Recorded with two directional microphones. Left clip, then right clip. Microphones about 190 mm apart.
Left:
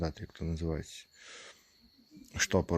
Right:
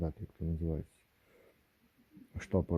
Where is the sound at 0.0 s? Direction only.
25° left (ahead or behind).